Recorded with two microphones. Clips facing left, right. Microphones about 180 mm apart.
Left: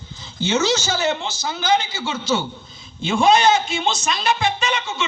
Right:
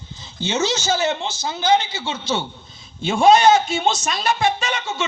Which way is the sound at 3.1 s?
45° right (ahead or behind).